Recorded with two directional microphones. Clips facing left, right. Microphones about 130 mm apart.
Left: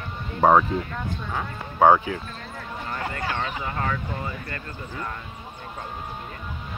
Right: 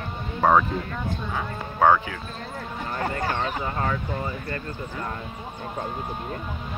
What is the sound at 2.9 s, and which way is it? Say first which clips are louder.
Speech: right 3 dB; 35° right (ahead or behind).